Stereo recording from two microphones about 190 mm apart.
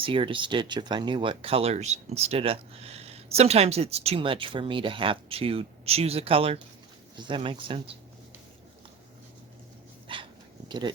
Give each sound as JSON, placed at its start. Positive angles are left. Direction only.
{"t": 0.0, "sound": "speech", "side_deg": -25}
{"t": 10.1, "sound": "dog", "side_deg": -25}
{"t": 10.7, "sound": "speech", "side_deg": -25}